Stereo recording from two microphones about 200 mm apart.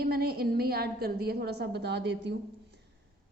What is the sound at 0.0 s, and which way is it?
A woman's voice, 50° right (ahead or behind).